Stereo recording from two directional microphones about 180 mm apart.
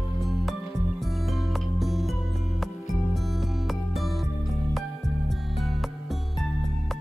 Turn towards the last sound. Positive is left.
turn(degrees=0)  # may be behind; listen again after turning